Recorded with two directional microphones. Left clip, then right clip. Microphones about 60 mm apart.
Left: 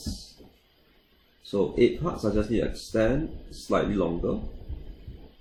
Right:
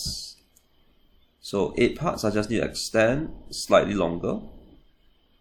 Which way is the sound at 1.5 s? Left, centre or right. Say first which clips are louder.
Even; right.